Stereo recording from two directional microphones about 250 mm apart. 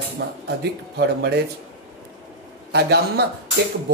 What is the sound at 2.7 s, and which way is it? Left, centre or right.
Speech, right.